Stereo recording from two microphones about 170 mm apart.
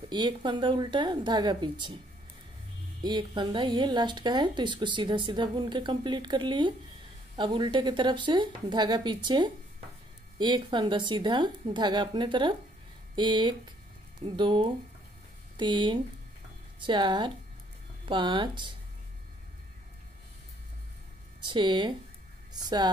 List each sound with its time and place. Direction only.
0.1 s speech: 25° right (ahead or behind)
3.0 s speech: 25° right (ahead or behind)
21.5 s speech: 25° right (ahead or behind)